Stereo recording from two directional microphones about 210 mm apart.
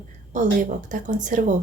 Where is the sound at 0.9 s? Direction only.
35° right (ahead or behind).